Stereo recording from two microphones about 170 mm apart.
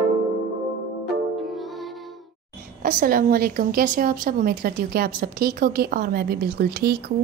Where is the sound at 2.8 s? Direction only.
55° right (ahead or behind).